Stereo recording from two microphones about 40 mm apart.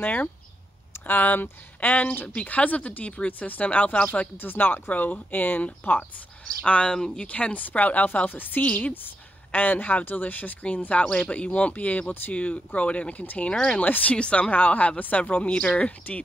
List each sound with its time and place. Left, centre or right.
0.0 s speech: left
4.4 s speech: left
6.6 s a woman's voice: left
11.1 s speech: left
14.1 s speech: left
14.5 s speech: left
16.1 s speech: left